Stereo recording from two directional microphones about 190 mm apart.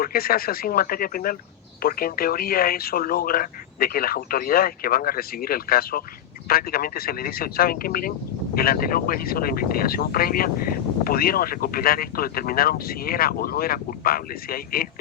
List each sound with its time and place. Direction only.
0.0 s speech: 50° left (ahead or behind)